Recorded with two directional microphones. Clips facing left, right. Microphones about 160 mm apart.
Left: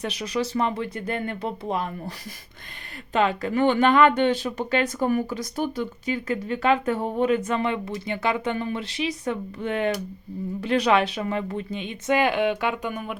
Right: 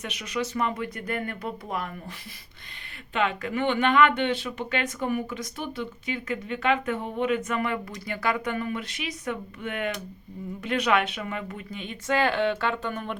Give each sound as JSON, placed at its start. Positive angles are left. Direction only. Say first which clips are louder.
{"t": 0.0, "sound": "speech", "louder": "left 4 dB", "side_deg": 35}
{"t": 3.1, "sound": "speech", "louder": "left 4 dB", "side_deg": 35}